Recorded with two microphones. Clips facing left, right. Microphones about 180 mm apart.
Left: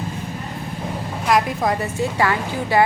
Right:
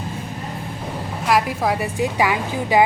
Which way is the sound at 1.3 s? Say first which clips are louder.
Even; 5° right (ahead or behind).